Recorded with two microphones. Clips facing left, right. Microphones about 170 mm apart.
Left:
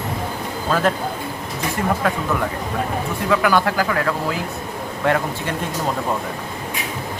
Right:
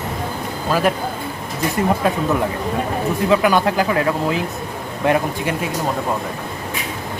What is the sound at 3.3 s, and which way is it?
Speech, 20° right (ahead or behind).